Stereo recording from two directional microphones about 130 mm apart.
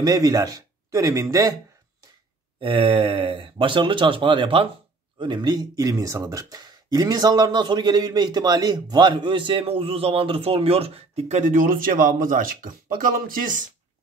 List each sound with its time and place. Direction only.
0.0 s speech: 30° right (ahead or behind)
2.6 s speech: 45° right (ahead or behind); by 13.7 s 85° right